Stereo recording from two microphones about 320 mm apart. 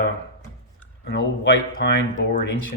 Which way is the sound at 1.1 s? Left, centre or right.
Left.